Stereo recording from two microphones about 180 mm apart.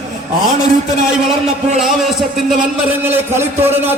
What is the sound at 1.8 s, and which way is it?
A man's voice, centre (ahead or behind).